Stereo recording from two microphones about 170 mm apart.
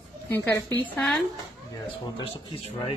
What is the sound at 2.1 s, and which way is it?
Speech, 30° left (ahead or behind).